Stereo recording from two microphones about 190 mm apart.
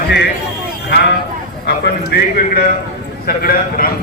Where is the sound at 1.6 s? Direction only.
60° left (ahead or behind).